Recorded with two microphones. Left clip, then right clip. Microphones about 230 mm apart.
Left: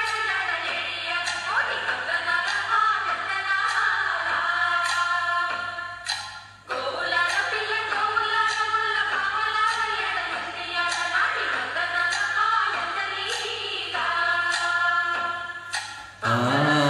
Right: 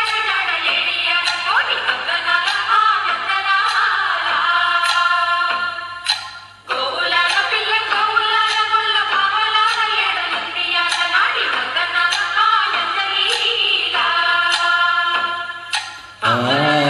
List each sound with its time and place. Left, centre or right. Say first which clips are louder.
0.0 s music: right 7 dB; right
7.0 s music: right 7 dB; right